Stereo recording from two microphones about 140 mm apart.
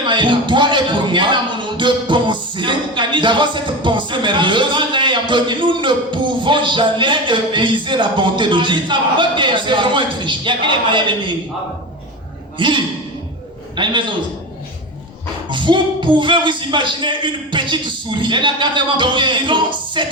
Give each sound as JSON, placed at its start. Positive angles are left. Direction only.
{"t": 0.0, "sound": "speech", "side_deg": -35}
{"t": 12.5, "sound": "a man's voice", "side_deg": -35}
{"t": 15.4, "sound": "speech", "side_deg": -35}